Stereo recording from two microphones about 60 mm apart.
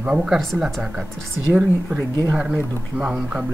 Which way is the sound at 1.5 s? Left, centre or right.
Centre.